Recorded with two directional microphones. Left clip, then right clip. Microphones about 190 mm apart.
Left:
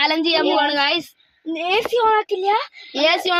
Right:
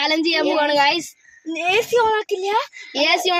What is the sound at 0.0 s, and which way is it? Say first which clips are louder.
Speech: left 1 dB; 15° left (ahead or behind).